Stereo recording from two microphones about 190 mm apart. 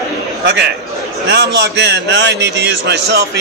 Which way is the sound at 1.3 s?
65° right (ahead or behind).